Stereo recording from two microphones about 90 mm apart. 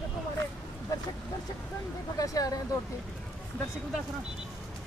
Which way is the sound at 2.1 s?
40° left (ahead or behind).